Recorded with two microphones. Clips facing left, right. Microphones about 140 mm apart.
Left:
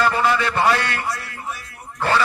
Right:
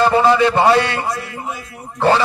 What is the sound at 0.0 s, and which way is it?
A man's voice, 25° right (ahead or behind).